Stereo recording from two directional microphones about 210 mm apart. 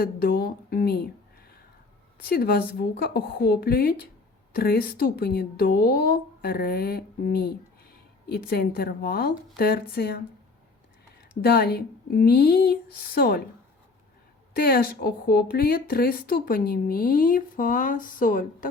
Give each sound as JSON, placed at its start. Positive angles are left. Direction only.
{"t": 0.0, "sound": "a woman's voice", "side_deg": 45}
{"t": 2.2, "sound": "speech", "side_deg": 45}
{"t": 11.4, "sound": "speech", "side_deg": 50}
{"t": 14.5, "sound": "speech", "side_deg": 45}